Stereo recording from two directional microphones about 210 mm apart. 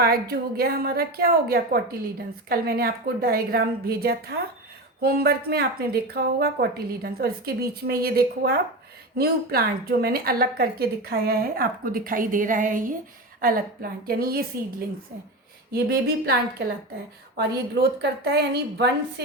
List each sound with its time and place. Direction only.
0.0 s a woman's voice: 45° right (ahead or behind)
15.7 s a woman's voice: 45° right (ahead or behind)
18.0 s a woman's voice: 50° right (ahead or behind)